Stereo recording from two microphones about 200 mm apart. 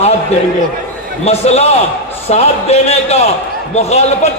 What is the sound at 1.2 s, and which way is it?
A man's voice, 30° left (ahead or behind).